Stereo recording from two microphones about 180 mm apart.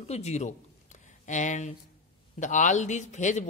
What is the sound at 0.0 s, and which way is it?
Speech, 35° left (ahead or behind).